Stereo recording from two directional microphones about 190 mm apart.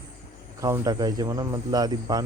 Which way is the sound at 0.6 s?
20° right (ahead or behind).